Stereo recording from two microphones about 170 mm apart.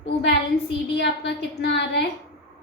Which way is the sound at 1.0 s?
90° left.